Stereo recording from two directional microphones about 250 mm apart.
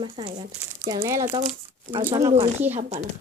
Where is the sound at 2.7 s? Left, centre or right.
Right.